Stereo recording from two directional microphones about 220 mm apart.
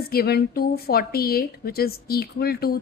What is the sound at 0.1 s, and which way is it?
A woman's voice, 45° left (ahead or behind).